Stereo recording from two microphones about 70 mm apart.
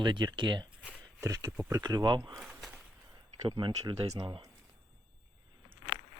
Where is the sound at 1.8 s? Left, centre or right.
Right.